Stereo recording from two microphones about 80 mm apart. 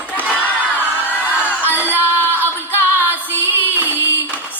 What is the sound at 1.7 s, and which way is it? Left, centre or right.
Music, right.